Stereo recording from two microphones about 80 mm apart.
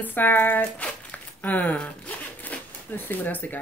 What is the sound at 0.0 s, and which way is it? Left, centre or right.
Speech, left.